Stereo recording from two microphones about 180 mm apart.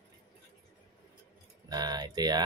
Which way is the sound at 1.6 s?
20° right (ahead or behind).